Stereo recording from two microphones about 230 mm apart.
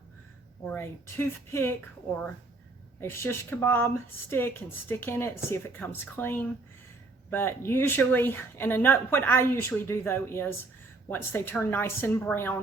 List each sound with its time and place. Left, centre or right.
0.6 s speech: centre